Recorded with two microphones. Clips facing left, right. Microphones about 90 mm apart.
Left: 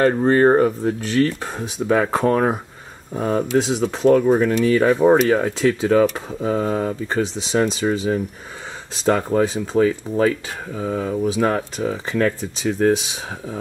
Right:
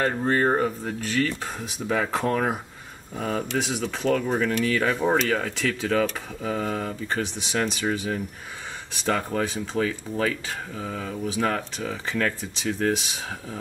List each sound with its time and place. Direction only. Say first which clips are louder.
0.0 s speech: left 8 dB; 40° left (ahead or behind)
5.0 s speech: left 9 dB; 40° left (ahead or behind)
5.3 s speech: left 8 dB; 25° left (ahead or behind)